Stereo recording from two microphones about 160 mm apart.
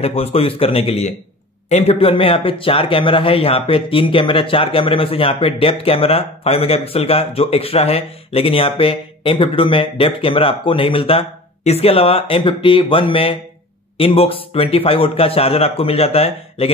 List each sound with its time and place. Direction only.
0.0 s speech: 40° left (ahead or behind)